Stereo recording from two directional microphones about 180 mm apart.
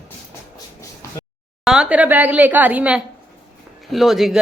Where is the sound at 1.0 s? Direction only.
15° left (ahead or behind).